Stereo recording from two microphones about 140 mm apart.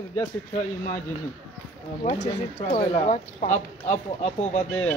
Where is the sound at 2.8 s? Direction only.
55° left (ahead or behind).